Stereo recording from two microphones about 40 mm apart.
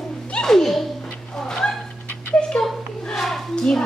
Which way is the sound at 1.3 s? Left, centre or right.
Centre.